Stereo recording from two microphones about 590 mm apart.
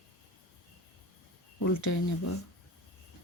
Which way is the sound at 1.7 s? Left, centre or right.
Left.